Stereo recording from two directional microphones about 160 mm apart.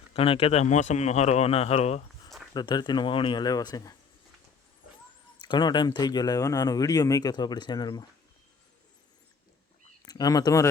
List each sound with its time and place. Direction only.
0.1 s speech: 35° left (ahead or behind)
2.5 s speech: 25° left (ahead or behind)
5.5 s speech: 30° left (ahead or behind)
10.1 s speech: 25° left (ahead or behind)